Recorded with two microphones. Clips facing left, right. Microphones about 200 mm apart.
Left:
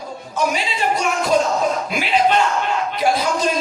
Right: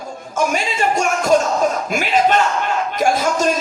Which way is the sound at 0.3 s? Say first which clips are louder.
Right 2 dB; 45° right (ahead or behind).